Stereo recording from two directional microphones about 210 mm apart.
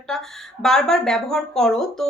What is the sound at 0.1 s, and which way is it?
A woman's voice, centre (ahead or behind).